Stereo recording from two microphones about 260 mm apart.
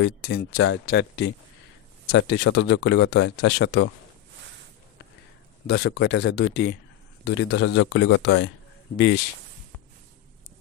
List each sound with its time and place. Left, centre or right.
0.0 s speech: left
5.7 s speech: left